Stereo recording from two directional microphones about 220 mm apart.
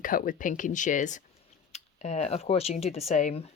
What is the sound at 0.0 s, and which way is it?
Speech, 40° left (ahead or behind).